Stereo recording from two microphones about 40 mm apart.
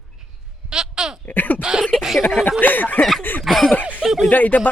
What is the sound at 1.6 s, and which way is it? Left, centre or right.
Speech, centre.